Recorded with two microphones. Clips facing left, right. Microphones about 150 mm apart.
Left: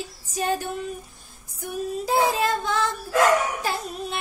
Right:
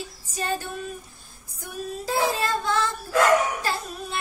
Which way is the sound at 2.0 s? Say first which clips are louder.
Left 3 dB; 15° left (ahead or behind).